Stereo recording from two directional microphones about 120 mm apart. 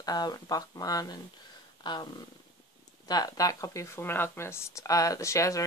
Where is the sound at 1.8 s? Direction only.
35° left (ahead or behind).